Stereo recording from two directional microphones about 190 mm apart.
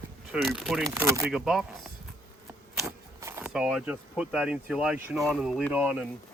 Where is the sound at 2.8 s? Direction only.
15° right (ahead or behind).